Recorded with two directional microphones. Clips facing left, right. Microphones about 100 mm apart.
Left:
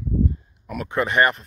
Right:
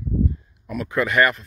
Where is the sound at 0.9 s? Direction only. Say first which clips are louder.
Even; 35° left (ahead or behind).